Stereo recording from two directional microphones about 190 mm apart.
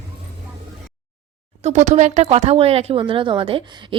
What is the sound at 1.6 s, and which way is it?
Speech, 35° right (ahead or behind).